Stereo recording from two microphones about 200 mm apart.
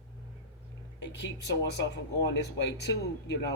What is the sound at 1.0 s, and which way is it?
A man's voice, 60° left (ahead or behind).